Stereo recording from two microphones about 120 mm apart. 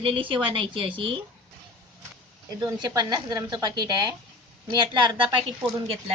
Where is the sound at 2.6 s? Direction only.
25° right (ahead or behind).